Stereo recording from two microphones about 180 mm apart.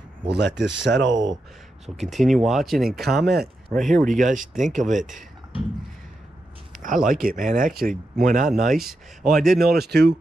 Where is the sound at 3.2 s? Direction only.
65° right (ahead or behind).